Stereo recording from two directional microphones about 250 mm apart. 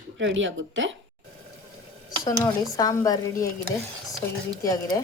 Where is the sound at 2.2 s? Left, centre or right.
Centre.